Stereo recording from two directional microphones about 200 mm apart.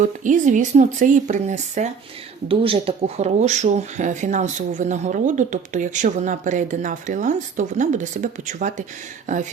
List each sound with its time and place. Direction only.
0.0 s speech: 40° right (ahead or behind)